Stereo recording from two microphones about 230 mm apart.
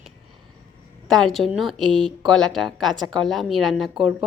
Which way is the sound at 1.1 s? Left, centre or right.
Centre.